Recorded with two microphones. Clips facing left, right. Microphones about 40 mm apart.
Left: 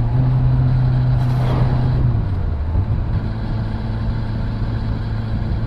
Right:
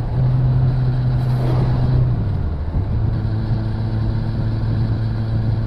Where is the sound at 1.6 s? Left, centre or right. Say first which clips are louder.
Left 1 dB; centre.